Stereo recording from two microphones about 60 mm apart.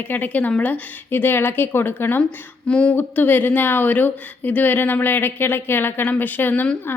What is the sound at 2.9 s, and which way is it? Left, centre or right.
Speech, left.